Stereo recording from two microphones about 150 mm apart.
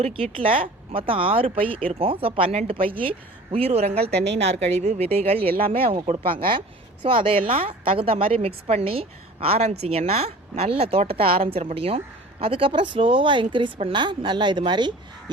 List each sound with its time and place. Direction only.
0.0 s a woman's voice: 40° right (ahead or behind)